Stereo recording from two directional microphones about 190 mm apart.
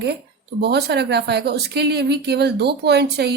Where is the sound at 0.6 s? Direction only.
60° right (ahead or behind).